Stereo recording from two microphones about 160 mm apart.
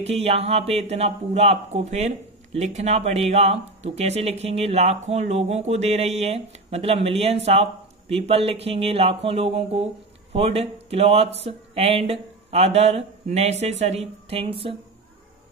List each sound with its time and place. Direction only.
0.0 s speech: 40° right (ahead or behind)